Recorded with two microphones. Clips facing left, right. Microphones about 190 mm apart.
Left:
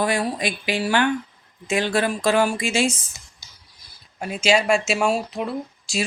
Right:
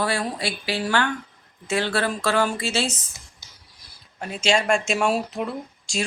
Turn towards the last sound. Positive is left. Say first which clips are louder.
# left 3 dB
turn(degrees=5)  # may be behind; listen again after turning